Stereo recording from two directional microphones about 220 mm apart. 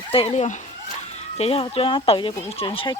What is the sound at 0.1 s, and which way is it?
Speech, 25° left (ahead or behind).